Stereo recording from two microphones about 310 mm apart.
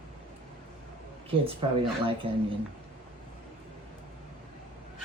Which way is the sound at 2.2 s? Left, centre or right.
Centre.